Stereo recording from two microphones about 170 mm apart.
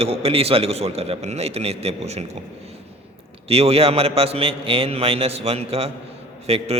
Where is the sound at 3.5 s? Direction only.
35° right (ahead or behind).